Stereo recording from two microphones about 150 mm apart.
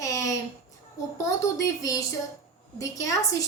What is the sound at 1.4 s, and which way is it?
A woman's voice, 20° left (ahead or behind).